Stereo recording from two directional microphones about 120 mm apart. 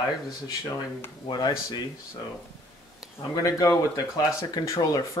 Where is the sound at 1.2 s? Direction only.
35° left (ahead or behind).